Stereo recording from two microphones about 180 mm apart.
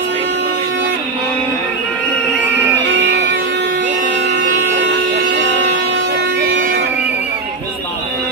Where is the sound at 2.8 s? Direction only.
75° right (ahead or behind).